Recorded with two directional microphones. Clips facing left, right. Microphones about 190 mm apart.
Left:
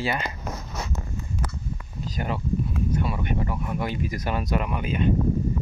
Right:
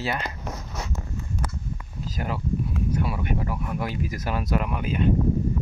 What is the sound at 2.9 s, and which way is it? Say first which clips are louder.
Speech: right 1 dB; 10° right (ahead or behind).